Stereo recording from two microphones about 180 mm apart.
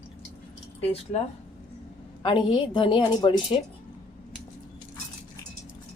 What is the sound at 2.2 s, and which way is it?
A woman's voice, 30° left (ahead or behind).